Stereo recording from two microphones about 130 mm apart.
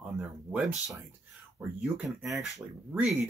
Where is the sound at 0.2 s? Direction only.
10° right (ahead or behind).